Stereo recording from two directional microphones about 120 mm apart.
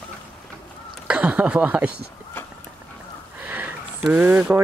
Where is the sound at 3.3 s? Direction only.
15° right (ahead or behind).